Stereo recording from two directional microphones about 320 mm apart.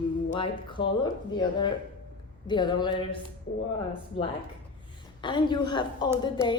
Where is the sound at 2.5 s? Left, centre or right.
Centre.